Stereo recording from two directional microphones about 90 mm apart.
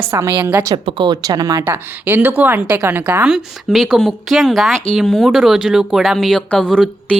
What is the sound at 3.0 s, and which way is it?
Speech, 15° right (ahead or behind).